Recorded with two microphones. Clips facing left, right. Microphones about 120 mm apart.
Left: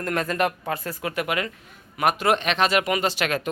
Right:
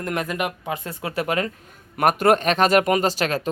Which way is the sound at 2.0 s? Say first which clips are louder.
Right 4 dB; 50° right (ahead or behind).